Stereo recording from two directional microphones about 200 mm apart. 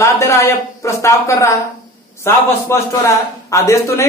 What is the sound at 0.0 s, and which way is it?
A man's voice, 15° left (ahead or behind).